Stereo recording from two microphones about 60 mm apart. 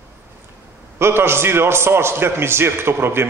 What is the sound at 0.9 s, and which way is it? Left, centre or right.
A man's voice, right.